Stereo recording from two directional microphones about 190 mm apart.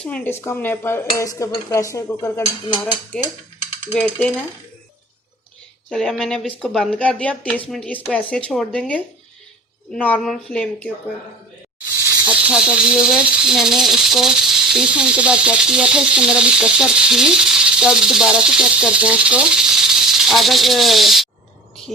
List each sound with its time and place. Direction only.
0.0 s dishes: 10° left (ahead or behind)
3.9 s speech: 5° left (ahead or behind)
5.9 s speech: 5° left (ahead or behind)
7.7 s dishes: 5° left (ahead or behind)
8.4 s speech: 5° left (ahead or behind)
12.3 s speech: 5° right (ahead or behind)